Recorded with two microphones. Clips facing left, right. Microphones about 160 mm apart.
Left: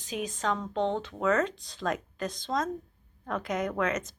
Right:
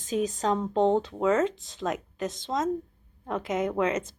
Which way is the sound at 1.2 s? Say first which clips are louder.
Even; 25° right (ahead or behind).